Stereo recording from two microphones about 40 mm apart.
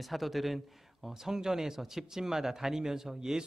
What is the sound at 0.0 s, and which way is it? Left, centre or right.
Speech, centre.